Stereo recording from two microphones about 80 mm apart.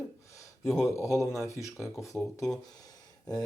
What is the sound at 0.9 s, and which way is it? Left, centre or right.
A man's voice, left.